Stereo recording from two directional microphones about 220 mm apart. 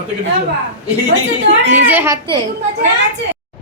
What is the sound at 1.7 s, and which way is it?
Speech, 10° right (ahead or behind).